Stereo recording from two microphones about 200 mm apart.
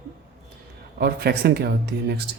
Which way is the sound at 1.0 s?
50° right (ahead or behind).